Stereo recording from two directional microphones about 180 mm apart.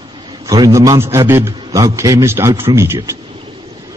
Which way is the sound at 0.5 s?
20° right (ahead or behind).